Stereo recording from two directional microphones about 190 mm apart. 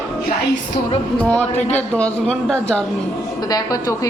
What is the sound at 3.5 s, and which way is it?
Speech, 20° left (ahead or behind).